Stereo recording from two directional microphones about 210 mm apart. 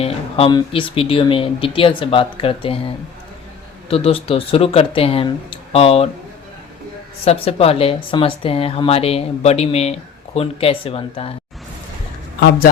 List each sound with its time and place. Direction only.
0.0 s speech: 25° left (ahead or behind)
7.3 s speech: 30° left (ahead or behind)